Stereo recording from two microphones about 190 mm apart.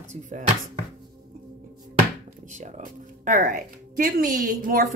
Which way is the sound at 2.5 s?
40° right (ahead or behind).